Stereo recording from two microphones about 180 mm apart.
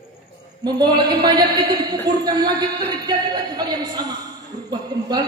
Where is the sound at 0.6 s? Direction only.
20° right (ahead or behind).